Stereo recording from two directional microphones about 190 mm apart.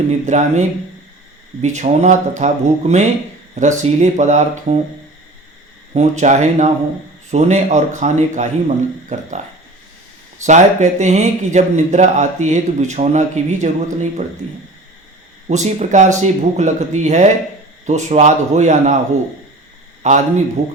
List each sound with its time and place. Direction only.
0.1 s speech: 40° right (ahead or behind)
1.6 s speech: 40° right (ahead or behind)
5.9 s speech: 35° right (ahead or behind)
10.4 s speech: 40° right (ahead or behind)
15.4 s speech: 35° right (ahead or behind)
20.0 s a man's voice: 40° right (ahead or behind)